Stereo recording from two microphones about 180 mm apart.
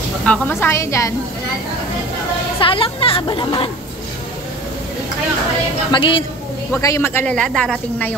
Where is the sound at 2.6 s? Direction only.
30° left (ahead or behind).